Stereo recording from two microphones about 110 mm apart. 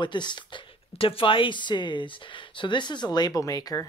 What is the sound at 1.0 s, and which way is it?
Speech, 55° left (ahead or behind).